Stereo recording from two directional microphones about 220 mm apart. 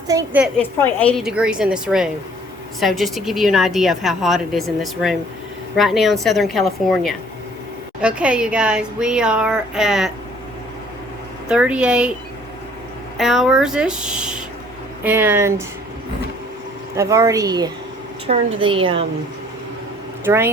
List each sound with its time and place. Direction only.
0.1 s speech: 15° right (ahead or behind)
0.4 s a woman's voice: 5° left (ahead or behind)
1.3 s a woman's voice: 5° right (ahead or behind)
11.4 s a woman's voice: 5° right (ahead or behind)
13.1 s a woman's voice: centre (ahead or behind)
17.0 s a woman's voice: 15° right (ahead or behind)
20.2 s speech: 10° right (ahead or behind)